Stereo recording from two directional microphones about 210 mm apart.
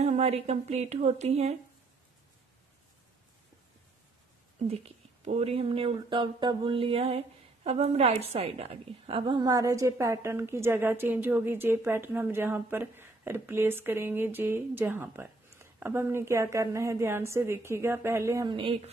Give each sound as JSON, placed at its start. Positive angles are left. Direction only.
{"t": 0.0, "sound": "a woman's voice", "side_deg": -30}
{"t": 5.2, "sound": "speech", "side_deg": -30}